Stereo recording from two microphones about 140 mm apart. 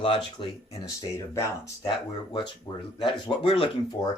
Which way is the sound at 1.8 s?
30° left (ahead or behind).